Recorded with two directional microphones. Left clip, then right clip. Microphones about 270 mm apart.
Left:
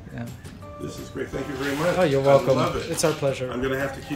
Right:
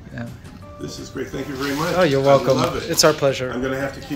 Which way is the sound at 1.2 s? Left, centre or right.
Centre.